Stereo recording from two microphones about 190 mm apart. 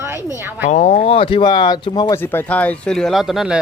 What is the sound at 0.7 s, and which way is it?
A man's voice, 35° left (ahead or behind).